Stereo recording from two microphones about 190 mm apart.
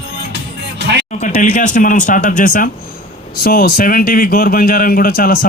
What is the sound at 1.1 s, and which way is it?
A man's voice, 40° left (ahead or behind).